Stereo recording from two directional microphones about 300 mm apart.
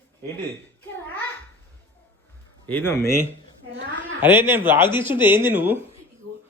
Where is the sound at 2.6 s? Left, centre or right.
Centre.